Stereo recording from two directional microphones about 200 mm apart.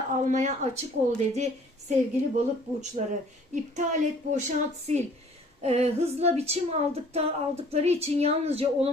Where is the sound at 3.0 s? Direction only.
35° right (ahead or behind).